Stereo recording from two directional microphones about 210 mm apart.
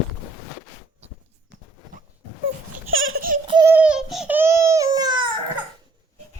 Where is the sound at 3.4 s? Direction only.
25° right (ahead or behind).